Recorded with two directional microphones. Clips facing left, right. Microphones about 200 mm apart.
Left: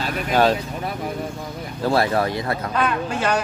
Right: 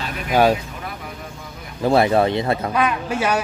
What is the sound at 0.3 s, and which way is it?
Speech, 10° right (ahead or behind).